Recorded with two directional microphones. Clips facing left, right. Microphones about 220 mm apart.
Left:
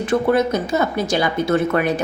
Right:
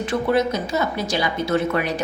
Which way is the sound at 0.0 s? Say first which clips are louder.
Left 3 dB; 50° left (ahead or behind).